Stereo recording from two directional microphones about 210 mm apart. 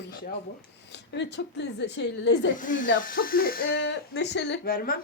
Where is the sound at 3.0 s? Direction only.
40° left (ahead or behind).